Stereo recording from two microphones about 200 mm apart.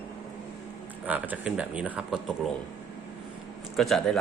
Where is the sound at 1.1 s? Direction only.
10° right (ahead or behind).